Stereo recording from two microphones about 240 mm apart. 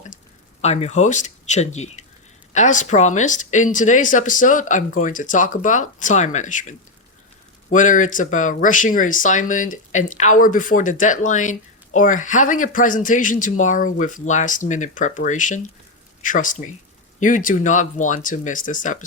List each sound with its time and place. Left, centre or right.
0.6 s speech: left